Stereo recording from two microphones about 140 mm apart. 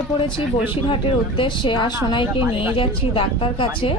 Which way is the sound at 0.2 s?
40° left (ahead or behind).